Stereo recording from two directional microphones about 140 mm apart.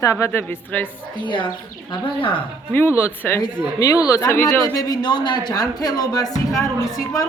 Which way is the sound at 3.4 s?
35° left (ahead or behind).